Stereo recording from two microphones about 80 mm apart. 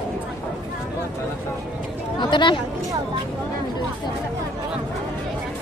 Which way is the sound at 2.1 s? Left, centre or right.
Left.